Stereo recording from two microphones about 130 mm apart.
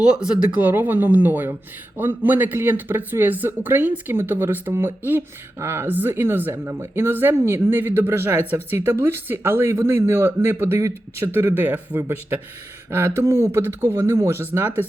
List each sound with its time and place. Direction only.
0.0 s speech: 5° right (ahead or behind)